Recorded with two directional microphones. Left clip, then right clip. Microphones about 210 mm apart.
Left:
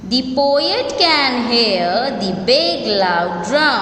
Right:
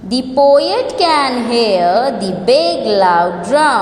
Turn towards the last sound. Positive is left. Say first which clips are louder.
# right 3 dB
turn(degrees=-15)  # may be behind; listen again after turning